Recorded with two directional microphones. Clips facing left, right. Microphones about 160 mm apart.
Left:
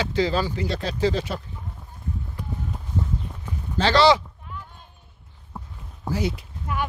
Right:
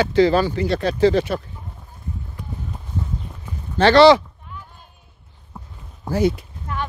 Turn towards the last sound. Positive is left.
turn(degrees=-50)  # may be behind; listen again after turning